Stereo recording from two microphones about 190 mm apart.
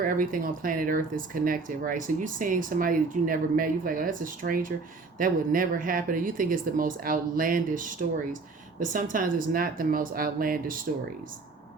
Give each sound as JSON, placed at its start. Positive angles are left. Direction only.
{"t": 0.0, "sound": "speech", "side_deg": -45}